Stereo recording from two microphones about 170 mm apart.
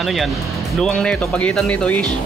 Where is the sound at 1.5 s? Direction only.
5° left (ahead or behind).